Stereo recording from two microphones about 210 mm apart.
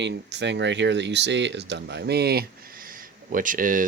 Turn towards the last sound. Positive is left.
turn(degrees=-40)  # may be behind; listen again after turning